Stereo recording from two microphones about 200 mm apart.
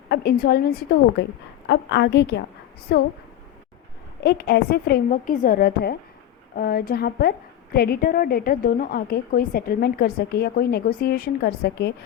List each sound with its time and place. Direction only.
0.1 s a woman's voice: 50° left (ahead or behind)
4.2 s a woman's voice: 50° left (ahead or behind)